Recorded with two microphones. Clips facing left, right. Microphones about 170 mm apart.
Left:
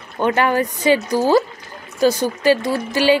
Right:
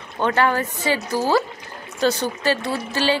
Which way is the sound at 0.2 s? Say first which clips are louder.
Left 3 dB; 15° left (ahead or behind).